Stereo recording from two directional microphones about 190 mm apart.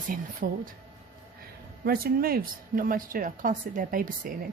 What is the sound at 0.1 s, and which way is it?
Speech, 45° right (ahead or behind).